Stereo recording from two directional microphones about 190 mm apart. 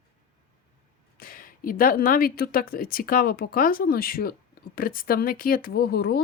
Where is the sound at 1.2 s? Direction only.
50° left (ahead or behind).